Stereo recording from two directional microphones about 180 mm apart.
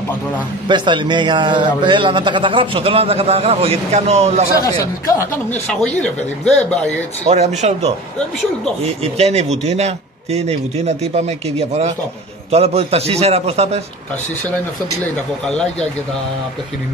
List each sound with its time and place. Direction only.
0.7 s a man's voice: 25° right (ahead or behind)
4.6 s speech: 15° left (ahead or behind)
5.7 s speech: 5° left (ahead or behind)
7.2 s a man's voice: 35° right (ahead or behind)
9.0 s a man's voice: 35° right (ahead or behind)
15.4 s speech: 5° left (ahead or behind)